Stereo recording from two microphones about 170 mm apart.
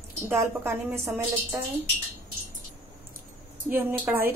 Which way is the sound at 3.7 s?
10° right (ahead or behind).